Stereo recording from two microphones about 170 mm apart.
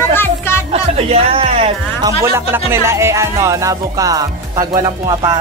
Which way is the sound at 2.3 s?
15° right (ahead or behind).